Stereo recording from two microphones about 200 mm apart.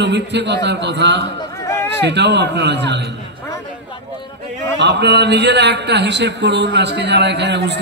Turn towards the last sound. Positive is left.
turn(degrees=-60)  # may be behind; listen again after turning